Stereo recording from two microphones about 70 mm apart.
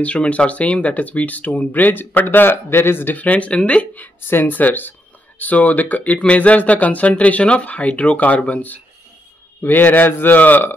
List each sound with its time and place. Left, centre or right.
0.0 s speech: centre